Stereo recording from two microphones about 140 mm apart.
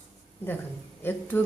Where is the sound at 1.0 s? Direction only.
15° left (ahead or behind).